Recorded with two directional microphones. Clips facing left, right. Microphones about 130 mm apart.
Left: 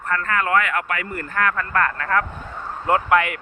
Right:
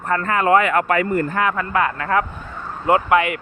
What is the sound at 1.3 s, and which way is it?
Speech, 15° right (ahead or behind).